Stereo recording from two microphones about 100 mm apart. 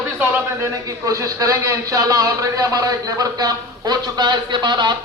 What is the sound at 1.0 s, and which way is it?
A man's voice, 35° right (ahead or behind).